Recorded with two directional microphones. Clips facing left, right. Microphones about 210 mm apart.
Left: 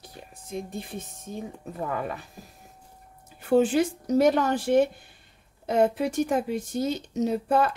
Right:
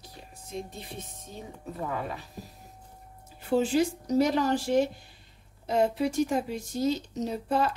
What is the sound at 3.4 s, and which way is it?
Speech, 55° left (ahead or behind).